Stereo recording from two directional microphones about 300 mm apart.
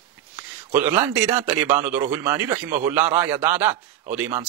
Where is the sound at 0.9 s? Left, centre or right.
Centre.